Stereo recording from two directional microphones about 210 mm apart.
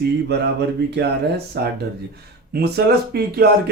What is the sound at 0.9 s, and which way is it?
Speech, 55° right (ahead or behind).